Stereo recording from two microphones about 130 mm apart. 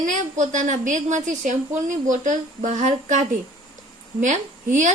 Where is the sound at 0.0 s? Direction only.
75° right (ahead or behind).